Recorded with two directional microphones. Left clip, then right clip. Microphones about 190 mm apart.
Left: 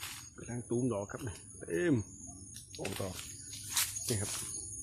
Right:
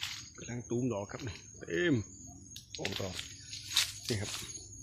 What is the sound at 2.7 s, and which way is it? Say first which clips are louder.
Speech: right 3 dB; 5° left (ahead or behind).